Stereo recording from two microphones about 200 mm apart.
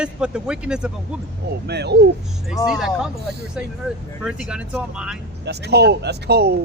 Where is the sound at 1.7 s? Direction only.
55° right (ahead or behind).